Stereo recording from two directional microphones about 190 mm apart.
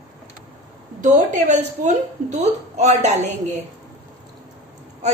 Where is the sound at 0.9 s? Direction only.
40° right (ahead or behind).